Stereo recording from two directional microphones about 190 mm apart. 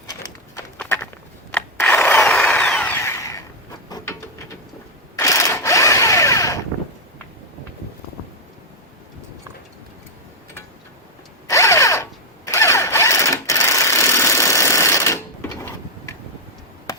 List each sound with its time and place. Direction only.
0.8 s a sound: 5° left (ahead or behind)
1.5 s tools: 10° left (ahead or behind)
3.8 s a sound: 20° left (ahead or behind)
5.1 s mechanisms: 15° left (ahead or behind)
11.4 s drill: 15° left (ahead or behind)
12.5 s sewing machine: 15° left (ahead or behind)